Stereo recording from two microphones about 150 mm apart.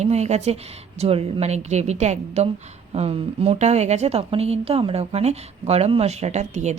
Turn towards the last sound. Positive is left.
turn(degrees=-50)  # may be behind; listen again after turning